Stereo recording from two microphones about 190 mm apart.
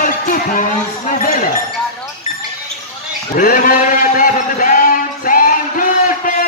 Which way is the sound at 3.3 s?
45° left (ahead or behind).